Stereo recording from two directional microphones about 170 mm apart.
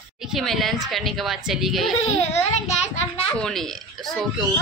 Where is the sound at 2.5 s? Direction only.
40° left (ahead or behind).